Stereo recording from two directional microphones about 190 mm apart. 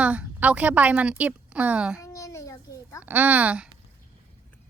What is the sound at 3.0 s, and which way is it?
Speech, 10° right (ahead or behind).